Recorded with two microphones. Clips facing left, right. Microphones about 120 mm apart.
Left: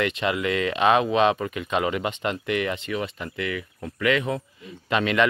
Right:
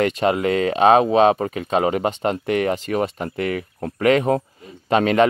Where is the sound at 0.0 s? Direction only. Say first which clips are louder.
Right 6 dB; 40° right (ahead or behind).